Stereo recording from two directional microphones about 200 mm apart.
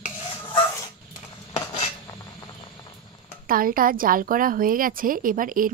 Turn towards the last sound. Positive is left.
turn(degrees=-45)  # may be behind; listen again after turning